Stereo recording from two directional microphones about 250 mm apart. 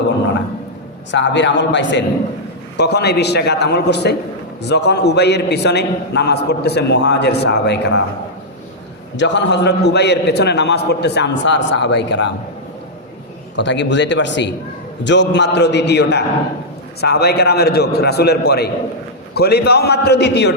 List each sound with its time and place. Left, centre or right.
1.1 s a man's voice: left
9.1 s a man's voice: left
13.6 s a man's voice: left